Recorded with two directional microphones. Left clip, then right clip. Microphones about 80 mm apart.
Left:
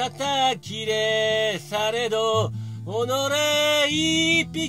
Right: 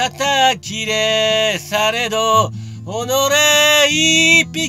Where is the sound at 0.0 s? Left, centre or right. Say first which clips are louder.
Right 8 dB; left.